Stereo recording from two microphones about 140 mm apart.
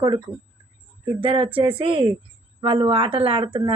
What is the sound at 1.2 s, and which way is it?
Speech, 40° right (ahead or behind).